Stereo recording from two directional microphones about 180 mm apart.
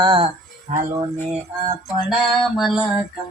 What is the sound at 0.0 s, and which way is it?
Speech, 25° right (ahead or behind).